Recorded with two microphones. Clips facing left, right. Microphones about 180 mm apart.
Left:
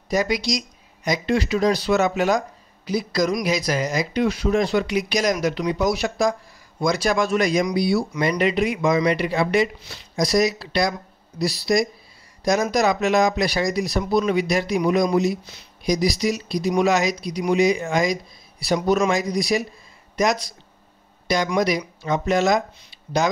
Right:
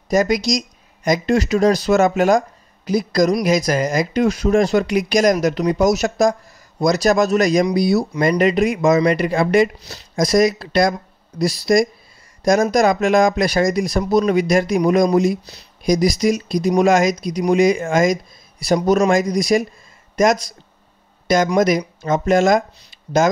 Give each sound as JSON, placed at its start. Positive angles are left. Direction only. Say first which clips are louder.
{"t": 0.1, "sound": "speech", "louder": "right 5 dB", "side_deg": -45}